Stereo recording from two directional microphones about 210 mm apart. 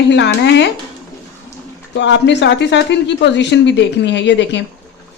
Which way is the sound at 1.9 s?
55° left (ahead or behind).